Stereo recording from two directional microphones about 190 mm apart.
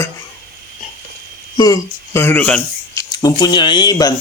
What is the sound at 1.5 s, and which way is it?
Speech, 20° left (ahead or behind).